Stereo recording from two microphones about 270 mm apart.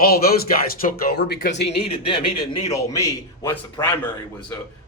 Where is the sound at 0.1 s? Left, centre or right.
Left.